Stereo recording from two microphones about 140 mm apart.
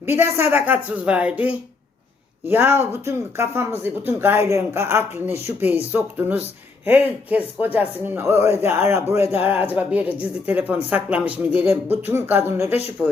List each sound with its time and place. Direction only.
0.0 s speech: 15° right (ahead or behind)